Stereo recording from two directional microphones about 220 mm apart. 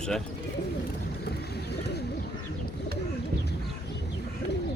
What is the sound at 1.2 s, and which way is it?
Bird, 50° left (ahead or behind).